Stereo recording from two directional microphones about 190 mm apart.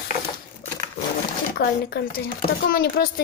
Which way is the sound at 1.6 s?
55° left (ahead or behind).